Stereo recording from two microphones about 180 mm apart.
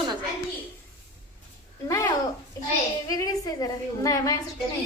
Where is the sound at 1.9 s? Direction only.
20° left (ahead or behind).